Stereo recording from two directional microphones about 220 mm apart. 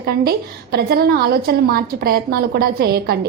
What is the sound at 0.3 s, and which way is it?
A woman's voice, 45° right (ahead or behind).